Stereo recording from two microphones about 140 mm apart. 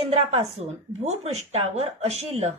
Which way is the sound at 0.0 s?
45° right (ahead or behind).